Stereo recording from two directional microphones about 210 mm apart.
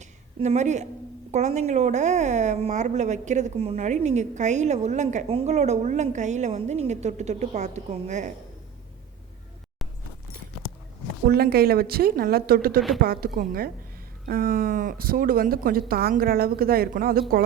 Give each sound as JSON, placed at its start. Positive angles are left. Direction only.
{"t": 0.3, "sound": "a woman's voice", "side_deg": -35}
{"t": 11.3, "sound": "speech", "side_deg": -45}